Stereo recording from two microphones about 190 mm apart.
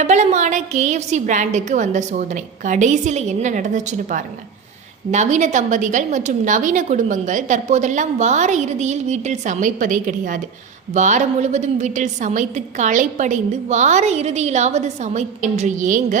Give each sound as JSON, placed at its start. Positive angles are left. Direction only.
{"t": 0.0, "sound": "a woman's voice", "side_deg": -35}